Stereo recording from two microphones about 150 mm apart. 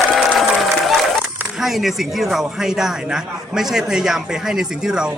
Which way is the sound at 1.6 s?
Centre (ahead or behind).